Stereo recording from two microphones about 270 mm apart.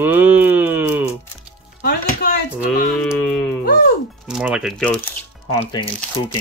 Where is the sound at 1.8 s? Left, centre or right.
Left.